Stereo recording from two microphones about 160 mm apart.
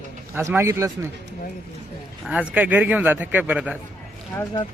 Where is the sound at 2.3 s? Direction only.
10° right (ahead or behind).